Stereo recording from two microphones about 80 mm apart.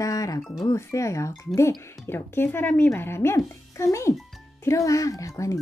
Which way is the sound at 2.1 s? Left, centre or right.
Left.